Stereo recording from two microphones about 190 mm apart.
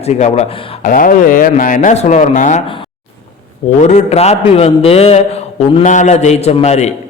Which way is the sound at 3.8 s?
40° left (ahead or behind).